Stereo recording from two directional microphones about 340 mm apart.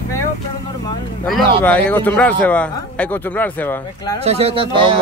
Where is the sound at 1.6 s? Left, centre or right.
Centre.